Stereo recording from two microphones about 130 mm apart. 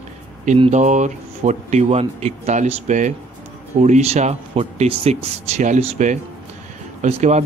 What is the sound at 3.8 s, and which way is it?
Speech, 60° right (ahead or behind).